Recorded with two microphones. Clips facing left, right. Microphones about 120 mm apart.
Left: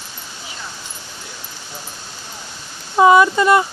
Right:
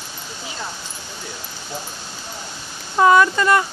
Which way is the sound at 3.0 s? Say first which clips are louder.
Left 3 dB; 15° left (ahead or behind).